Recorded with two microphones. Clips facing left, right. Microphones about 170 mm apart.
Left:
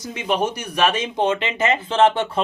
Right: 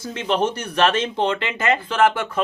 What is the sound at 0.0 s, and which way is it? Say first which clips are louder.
Speech: right 1 dB; 10° left (ahead or behind).